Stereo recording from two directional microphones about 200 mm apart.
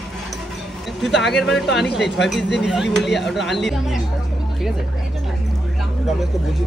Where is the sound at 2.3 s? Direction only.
60° left (ahead or behind).